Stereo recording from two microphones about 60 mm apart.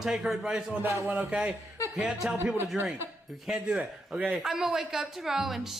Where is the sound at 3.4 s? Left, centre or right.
Centre.